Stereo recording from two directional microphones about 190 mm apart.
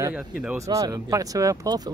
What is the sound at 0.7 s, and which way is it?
Speech, 15° right (ahead or behind).